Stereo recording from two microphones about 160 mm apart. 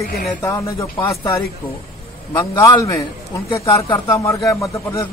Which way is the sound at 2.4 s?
25° left (ahead or behind).